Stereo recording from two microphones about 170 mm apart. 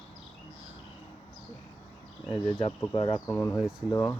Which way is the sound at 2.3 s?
35° left (ahead or behind).